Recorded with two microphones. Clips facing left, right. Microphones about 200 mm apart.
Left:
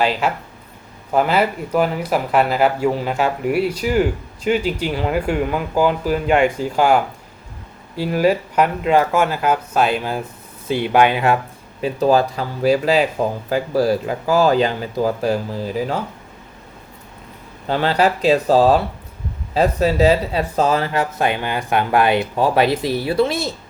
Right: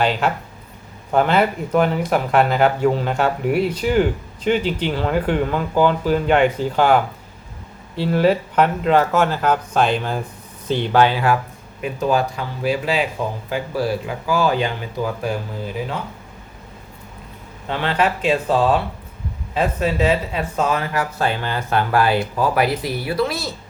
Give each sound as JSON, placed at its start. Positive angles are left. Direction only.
{"t": 0.0, "sound": "speech", "side_deg": 5}
{"t": 11.8, "sound": "speech", "side_deg": 35}
{"t": 17.7, "sound": "speech", "side_deg": 35}